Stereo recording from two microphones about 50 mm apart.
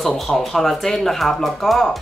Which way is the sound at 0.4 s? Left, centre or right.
Centre.